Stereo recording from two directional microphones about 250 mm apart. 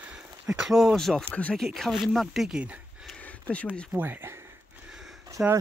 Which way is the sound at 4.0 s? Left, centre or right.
Centre.